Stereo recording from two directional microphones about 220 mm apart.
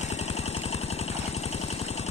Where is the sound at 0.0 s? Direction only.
30° left (ahead or behind).